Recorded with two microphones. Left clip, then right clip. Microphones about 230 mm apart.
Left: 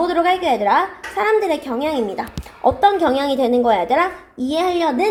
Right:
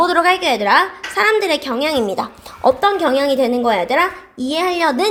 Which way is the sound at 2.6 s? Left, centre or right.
Right.